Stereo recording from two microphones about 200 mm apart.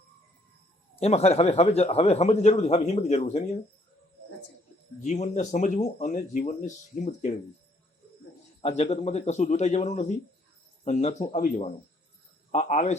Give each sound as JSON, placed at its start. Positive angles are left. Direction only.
{"t": 0.9, "sound": "a man's voice", "side_deg": 30}
{"t": 5.0, "sound": "a man's voice", "side_deg": 35}
{"t": 8.6, "sound": "a man's voice", "side_deg": 35}